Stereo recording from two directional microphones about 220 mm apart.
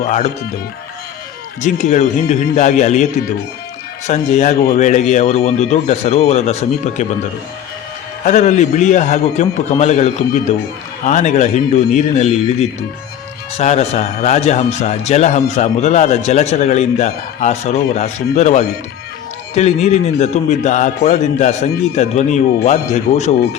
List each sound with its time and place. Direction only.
0.0 s a man's voice: 35° left (ahead or behind)
1.6 s a man's voice: 30° left (ahead or behind)
8.2 s a man's voice: 30° left (ahead or behind)